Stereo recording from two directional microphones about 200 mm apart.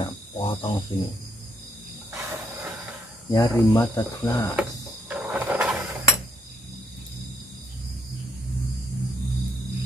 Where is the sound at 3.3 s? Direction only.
15° left (ahead or behind).